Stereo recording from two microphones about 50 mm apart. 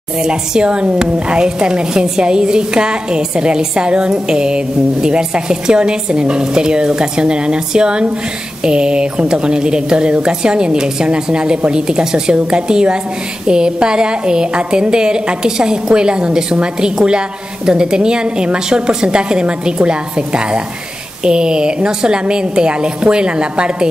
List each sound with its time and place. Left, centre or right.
0.2 s a woman's voice: centre